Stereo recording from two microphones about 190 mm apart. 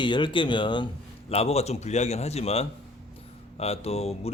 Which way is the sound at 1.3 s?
30° left (ahead or behind).